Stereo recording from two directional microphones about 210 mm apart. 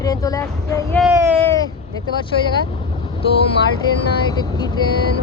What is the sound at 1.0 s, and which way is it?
Speech, 5° right (ahead or behind).